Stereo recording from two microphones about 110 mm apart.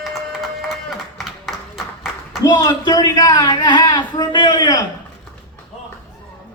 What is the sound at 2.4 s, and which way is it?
Speech, 35° left (ahead or behind).